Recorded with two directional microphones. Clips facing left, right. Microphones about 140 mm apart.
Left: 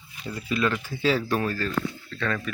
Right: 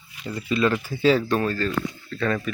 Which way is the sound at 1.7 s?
10° right (ahead or behind).